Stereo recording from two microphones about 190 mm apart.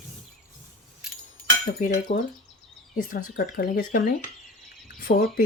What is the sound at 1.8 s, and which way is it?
Speech, 40° left (ahead or behind).